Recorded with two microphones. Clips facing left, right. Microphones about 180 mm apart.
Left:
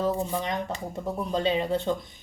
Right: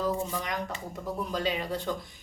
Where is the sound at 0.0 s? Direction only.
25° left (ahead or behind).